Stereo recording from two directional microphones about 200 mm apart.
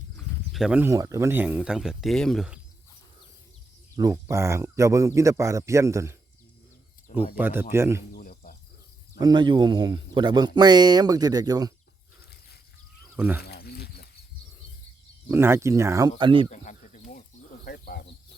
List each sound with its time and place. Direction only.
0.5 s speech: 5° right (ahead or behind)
3.9 s speech: 15° right (ahead or behind)
7.3 s speech: 10° right (ahead or behind)
8.1 s cricket: 45° left (ahead or behind)
9.1 s speech: 20° right (ahead or behind)
13.1 s speech: 10° right (ahead or behind)
13.4 s wild animals: 50° left (ahead or behind)
15.3 s speech: 10° right (ahead or behind)
16.5 s a sound: 40° left (ahead or behind)
17.7 s a sound: 50° left (ahead or behind)